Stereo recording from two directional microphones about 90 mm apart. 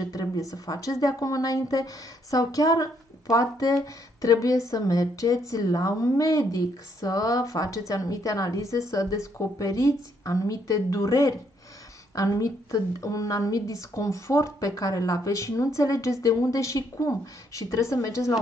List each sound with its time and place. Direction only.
0.1 s a woman's voice: 40° left (ahead or behind)